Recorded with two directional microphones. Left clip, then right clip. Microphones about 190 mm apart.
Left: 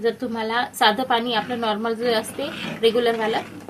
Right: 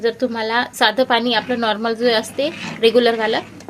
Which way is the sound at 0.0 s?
50° right (ahead or behind).